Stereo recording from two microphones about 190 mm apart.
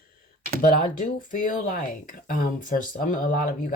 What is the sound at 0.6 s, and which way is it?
Speech, 45° left (ahead or behind).